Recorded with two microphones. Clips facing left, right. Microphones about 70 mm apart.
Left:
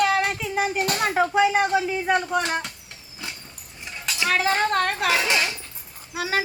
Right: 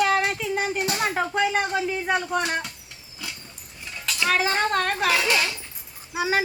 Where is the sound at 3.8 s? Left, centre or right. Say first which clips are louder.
Even; centre.